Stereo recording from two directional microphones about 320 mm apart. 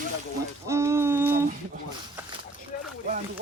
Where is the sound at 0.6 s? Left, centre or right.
Centre.